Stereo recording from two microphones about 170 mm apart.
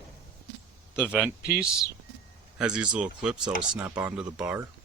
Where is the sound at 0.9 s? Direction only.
5° right (ahead or behind).